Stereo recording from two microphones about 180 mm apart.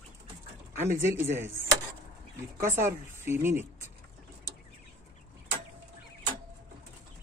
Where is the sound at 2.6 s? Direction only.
15° right (ahead or behind).